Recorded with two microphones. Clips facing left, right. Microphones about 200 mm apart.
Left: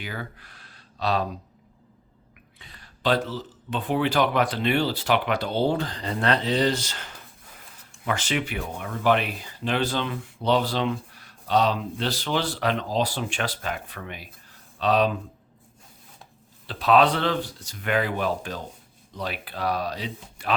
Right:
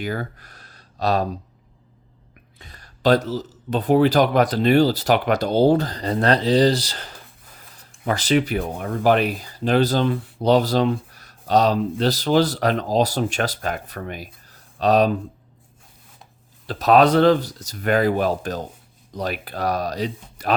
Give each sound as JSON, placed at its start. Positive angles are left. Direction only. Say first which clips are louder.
{"t": 0.0, "sound": "speech", "louder": "right 8 dB", "side_deg": -45}
{"t": 2.6, "sound": "speech", "louder": "right 5 dB", "side_deg": -40}
{"t": 16.6, "sound": "speech", "louder": "right 4 dB", "side_deg": -40}